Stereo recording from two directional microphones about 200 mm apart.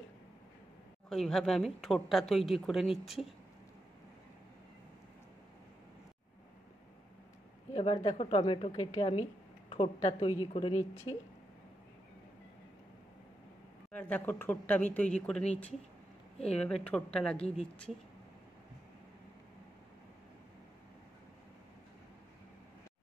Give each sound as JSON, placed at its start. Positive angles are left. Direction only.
{"t": 1.0, "sound": "speech", "side_deg": 0}
{"t": 7.7, "sound": "a woman's voice", "side_deg": 30}
{"t": 13.9, "sound": "a woman's voice", "side_deg": 10}
{"t": 16.5, "sound": "speech", "side_deg": 5}